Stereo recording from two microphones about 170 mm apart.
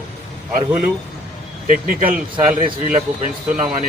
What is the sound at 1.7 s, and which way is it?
Speech, 50° right (ahead or behind).